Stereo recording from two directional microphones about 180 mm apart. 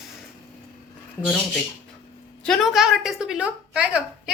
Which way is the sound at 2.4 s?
Centre (ahead or behind).